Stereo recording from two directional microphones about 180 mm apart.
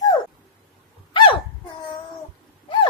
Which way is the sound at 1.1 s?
25° left (ahead or behind).